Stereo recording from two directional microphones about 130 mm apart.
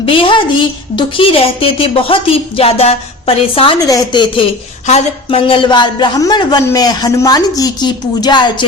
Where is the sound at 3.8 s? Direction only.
25° left (ahead or behind).